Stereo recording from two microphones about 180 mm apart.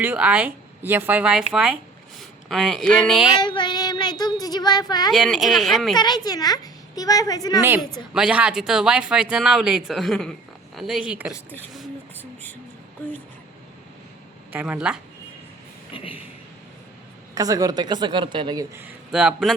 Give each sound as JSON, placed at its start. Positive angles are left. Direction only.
{"t": 0.0, "sound": "speech", "side_deg": -10}
{"t": 3.3, "sound": "a woman's voice", "side_deg": 25}
{"t": 5.1, "sound": "speech", "side_deg": 0}
{"t": 6.0, "sound": "a woman's voice", "side_deg": 25}
{"t": 8.1, "sound": "speech", "side_deg": -5}
{"t": 12.2, "sound": "music", "side_deg": 10}
{"t": 14.5, "sound": "speech", "side_deg": -10}
{"t": 15.9, "sound": "a woman's voice", "side_deg": 30}
{"t": 17.3, "sound": "a woman's voice", "side_deg": -20}
{"t": 19.1, "sound": "speech", "side_deg": -5}